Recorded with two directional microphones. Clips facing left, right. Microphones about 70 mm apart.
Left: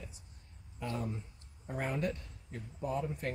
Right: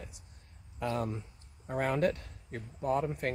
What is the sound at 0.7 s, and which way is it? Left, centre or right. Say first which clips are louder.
Speech: right 5 dB; right.